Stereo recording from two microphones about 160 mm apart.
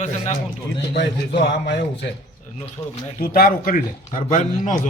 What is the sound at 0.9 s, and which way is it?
A man's voice, 85° left.